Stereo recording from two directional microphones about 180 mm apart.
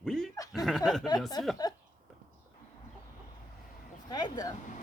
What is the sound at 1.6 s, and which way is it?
Speech, 25° left (ahead or behind).